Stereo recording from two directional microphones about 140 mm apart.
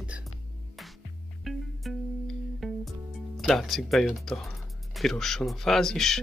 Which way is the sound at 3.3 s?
Centre (ahead or behind).